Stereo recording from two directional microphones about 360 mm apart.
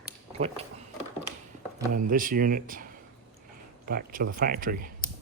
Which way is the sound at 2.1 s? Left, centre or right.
Right.